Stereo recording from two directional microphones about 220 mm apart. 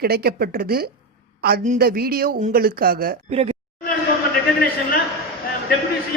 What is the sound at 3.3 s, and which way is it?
Speech, 30° right (ahead or behind).